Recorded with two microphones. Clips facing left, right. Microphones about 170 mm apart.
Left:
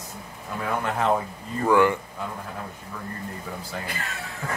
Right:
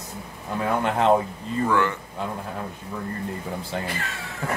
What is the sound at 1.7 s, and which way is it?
Speech, 15° left (ahead or behind).